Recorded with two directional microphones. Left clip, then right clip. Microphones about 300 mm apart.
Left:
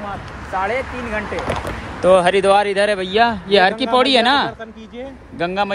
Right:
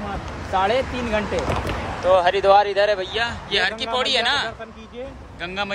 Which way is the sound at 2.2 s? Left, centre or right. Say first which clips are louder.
Left 2 dB; centre.